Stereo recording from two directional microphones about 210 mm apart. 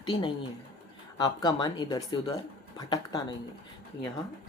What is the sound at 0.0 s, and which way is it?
Speech, 20° left (ahead or behind).